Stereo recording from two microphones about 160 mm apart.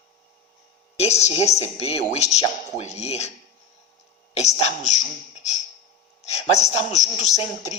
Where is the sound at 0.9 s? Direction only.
40° left (ahead or behind).